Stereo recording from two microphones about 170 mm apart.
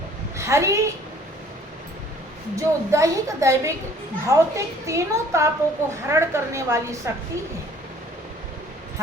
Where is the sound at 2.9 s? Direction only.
20° right (ahead or behind).